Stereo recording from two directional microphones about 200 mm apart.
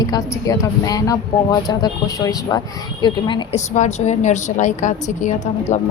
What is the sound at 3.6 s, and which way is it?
A woman's voice, 35° left (ahead or behind).